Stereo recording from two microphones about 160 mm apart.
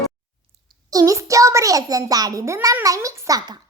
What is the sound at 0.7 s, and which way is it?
A child's voice, 20° right (ahead or behind).